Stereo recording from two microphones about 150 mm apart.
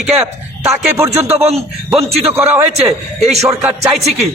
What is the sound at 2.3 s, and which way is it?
Speech, 10° right (ahead or behind).